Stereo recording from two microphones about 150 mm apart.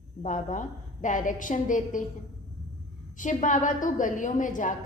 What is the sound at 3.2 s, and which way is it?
A woman's voice, 55° left (ahead or behind).